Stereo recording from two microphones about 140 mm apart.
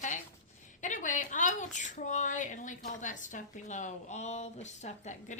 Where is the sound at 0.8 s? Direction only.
65° left (ahead or behind).